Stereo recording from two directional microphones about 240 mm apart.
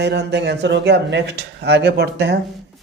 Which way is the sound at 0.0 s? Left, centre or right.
Right.